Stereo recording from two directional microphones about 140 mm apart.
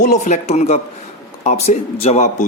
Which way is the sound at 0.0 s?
60° left (ahead or behind).